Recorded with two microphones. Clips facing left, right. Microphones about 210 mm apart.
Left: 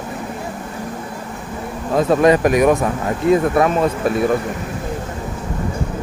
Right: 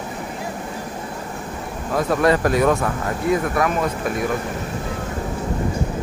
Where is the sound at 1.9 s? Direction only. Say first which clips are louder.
Left 5 dB; 20° left (ahead or behind).